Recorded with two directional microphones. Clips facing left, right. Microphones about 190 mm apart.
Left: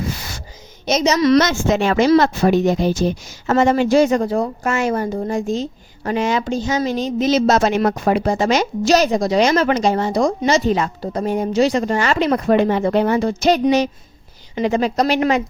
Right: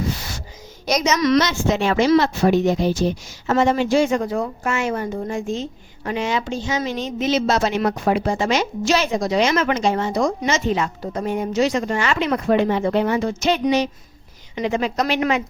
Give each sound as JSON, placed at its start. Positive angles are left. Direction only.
{"t": 0.9, "sound": "a woman's voice", "side_deg": 30}
{"t": 1.4, "sound": "a woman's voice", "side_deg": 45}